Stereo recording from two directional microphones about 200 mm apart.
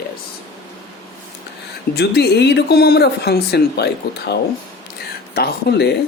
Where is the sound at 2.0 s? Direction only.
55° left (ahead or behind).